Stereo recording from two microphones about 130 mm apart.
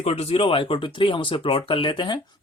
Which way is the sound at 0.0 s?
50° left (ahead or behind).